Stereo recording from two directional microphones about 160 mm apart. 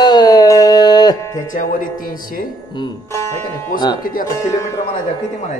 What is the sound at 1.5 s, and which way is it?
Speech, 55° left (ahead or behind).